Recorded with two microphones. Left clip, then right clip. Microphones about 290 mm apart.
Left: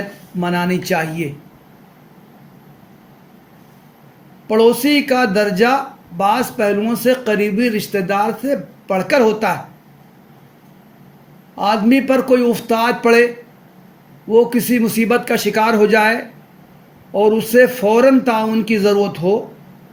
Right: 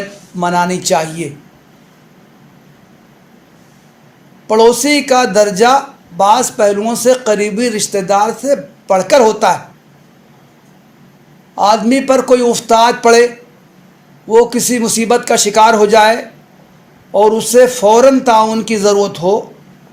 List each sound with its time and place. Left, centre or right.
0.4 s speech: centre
4.4 s speech: centre
11.5 s speech: centre
14.5 s speech: centre
17.1 s a man's voice: right
17.3 s speech: centre